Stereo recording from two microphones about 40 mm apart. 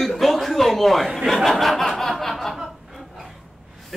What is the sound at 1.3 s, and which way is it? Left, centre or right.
Chuckle, centre.